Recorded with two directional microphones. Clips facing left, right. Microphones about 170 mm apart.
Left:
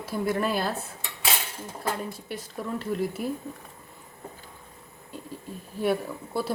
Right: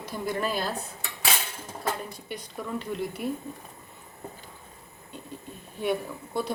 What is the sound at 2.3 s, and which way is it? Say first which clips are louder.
Speech: right 1 dB; centre (ahead or behind).